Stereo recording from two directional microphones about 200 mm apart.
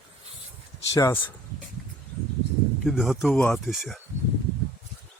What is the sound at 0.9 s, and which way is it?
Speech, 15° left (ahead or behind).